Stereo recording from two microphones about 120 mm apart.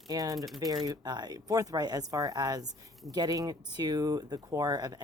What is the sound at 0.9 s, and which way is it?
Speech, 35° right (ahead or behind).